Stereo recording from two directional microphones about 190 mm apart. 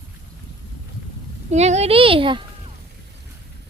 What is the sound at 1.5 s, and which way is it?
A woman's voice, 35° right (ahead or behind).